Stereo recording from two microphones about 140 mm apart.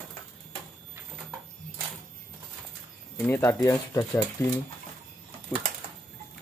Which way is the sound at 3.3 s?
20° left (ahead or behind).